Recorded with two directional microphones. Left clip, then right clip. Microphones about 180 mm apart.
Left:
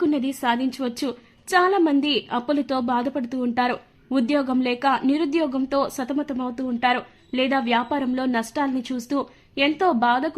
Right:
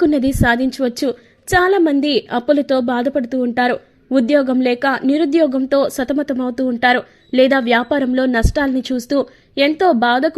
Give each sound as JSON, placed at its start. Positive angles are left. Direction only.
{"t": 0.0, "sound": "a woman's voice", "side_deg": -30}